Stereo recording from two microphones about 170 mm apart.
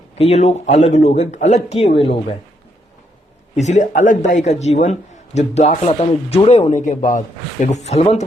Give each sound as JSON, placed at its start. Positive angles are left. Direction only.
{"t": 0.2, "sound": "a man's voice", "side_deg": 40}
{"t": 3.5, "sound": "a man's voice", "side_deg": 45}